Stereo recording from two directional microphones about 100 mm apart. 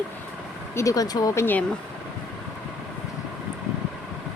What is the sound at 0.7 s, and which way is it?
Speech, 35° left (ahead or behind).